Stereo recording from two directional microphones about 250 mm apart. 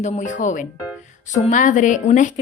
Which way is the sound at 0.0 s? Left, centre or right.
Left.